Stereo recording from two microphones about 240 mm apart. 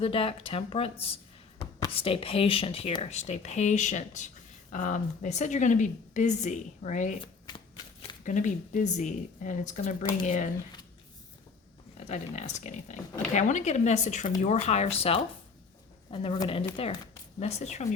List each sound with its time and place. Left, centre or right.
0.0 s speech: left
7.4 s shuffling cards: centre
8.2 s speech: left
11.9 s speech: left